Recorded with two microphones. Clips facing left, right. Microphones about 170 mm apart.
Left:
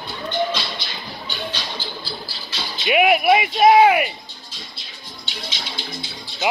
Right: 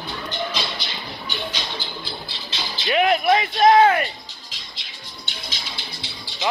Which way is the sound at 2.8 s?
10° left (ahead or behind).